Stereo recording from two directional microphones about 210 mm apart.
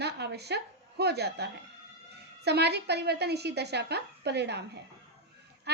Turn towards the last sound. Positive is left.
turn(degrees=-50)  # may be behind; listen again after turning